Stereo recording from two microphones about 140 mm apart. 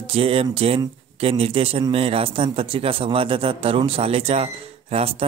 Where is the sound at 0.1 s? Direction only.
45° right (ahead or behind).